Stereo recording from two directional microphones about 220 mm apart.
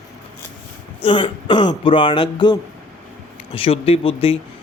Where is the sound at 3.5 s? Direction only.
25° left (ahead or behind).